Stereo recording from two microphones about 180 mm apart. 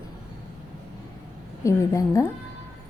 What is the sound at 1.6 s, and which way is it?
Speech, 15° left (ahead or behind).